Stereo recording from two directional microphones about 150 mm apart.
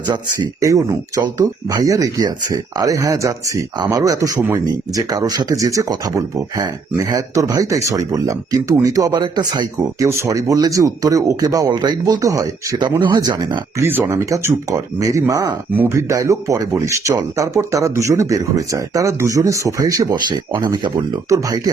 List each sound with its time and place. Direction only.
0.6 s speech: 25° right (ahead or behind)
4.4 s speech: 15° right (ahead or behind)
4.6 s speech: 25° right (ahead or behind)